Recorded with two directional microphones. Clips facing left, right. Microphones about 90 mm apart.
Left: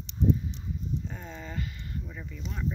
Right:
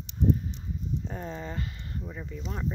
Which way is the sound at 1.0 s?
40° right (ahead or behind).